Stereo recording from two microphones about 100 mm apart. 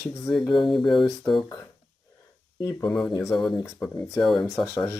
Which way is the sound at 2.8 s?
10° left (ahead or behind).